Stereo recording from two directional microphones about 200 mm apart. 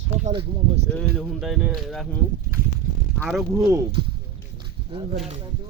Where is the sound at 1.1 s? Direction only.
Centre (ahead or behind).